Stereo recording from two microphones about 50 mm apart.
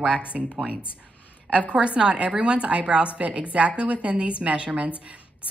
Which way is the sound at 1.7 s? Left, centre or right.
Right.